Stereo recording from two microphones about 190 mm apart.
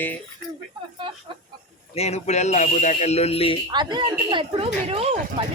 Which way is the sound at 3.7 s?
20° right (ahead or behind).